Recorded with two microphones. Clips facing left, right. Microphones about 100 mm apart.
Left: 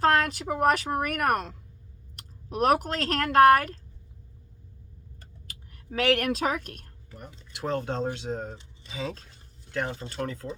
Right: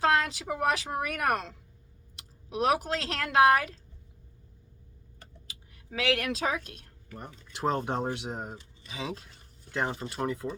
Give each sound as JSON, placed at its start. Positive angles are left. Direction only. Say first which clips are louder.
{"t": 0.0, "sound": "a woman's voice", "louder": "left 3 dB", "side_deg": 45}
{"t": 5.5, "sound": "speech", "louder": "left 4 dB", "side_deg": 55}
{"t": 7.2, "sound": "speech", "louder": "right 3 dB", "side_deg": -25}
{"t": 9.7, "sound": "speech", "louder": "even", "side_deg": -20}